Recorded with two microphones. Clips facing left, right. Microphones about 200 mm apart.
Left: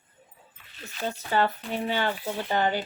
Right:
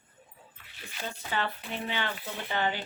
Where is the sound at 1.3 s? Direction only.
40° left (ahead or behind).